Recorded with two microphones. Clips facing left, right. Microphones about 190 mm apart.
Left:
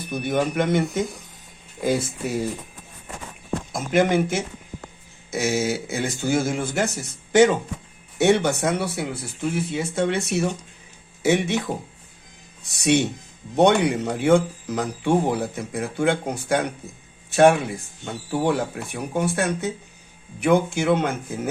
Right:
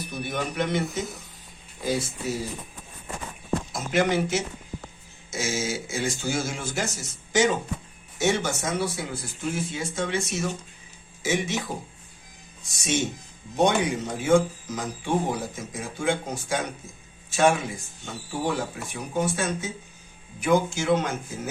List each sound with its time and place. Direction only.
0.0 s a man's voice: 50° left (ahead or behind)
3.7 s a man's voice: 50° left (ahead or behind)